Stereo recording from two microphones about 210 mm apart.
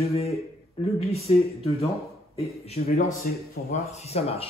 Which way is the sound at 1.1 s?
30° left (ahead or behind).